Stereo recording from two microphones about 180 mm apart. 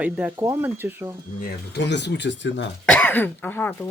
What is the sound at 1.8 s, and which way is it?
Speech, 75° left (ahead or behind).